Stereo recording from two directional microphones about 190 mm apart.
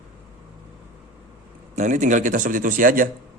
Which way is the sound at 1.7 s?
40° right (ahead or behind).